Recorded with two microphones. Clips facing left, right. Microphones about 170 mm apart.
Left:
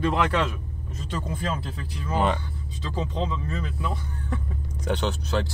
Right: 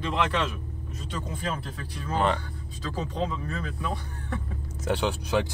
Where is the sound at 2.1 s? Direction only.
5° left (ahead or behind).